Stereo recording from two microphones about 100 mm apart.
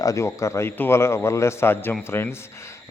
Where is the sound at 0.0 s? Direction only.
30° left (ahead or behind).